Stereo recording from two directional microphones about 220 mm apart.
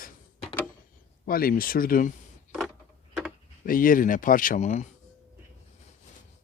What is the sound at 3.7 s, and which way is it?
Speech, 40° left (ahead or behind).